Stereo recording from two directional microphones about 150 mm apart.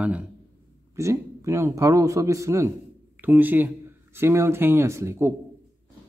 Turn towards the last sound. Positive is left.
turn(degrees=-15)  # may be behind; listen again after turning